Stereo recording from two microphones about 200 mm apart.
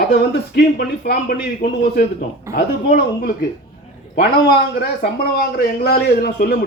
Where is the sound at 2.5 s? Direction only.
50° left (ahead or behind).